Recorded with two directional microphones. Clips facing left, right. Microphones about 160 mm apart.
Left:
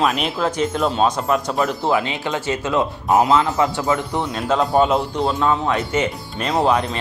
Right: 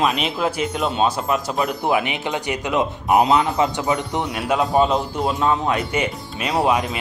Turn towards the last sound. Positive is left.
turn(degrees=-10)  # may be behind; listen again after turning